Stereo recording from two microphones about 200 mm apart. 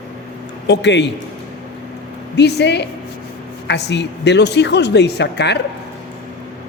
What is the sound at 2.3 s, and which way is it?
A man's voice, 55° left (ahead or behind).